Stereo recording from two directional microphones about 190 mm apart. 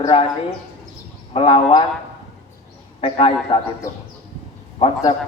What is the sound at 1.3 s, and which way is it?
Speech, 30° left (ahead or behind).